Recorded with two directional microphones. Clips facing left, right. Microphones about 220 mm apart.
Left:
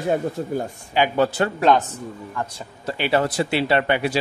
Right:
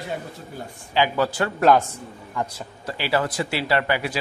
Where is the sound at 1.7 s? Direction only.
5° right (ahead or behind).